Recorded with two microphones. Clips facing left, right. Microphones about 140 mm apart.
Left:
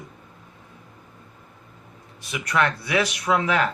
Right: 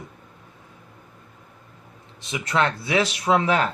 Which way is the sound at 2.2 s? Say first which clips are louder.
Even; 25° right (ahead or behind).